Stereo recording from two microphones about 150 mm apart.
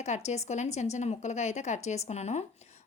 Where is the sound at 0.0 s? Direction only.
50° left (ahead or behind).